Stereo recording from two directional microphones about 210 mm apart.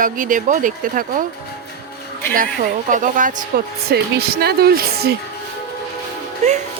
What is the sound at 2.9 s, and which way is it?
Speech, 40° right (ahead or behind).